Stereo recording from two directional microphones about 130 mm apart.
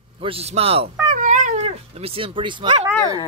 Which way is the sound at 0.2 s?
50° right (ahead or behind).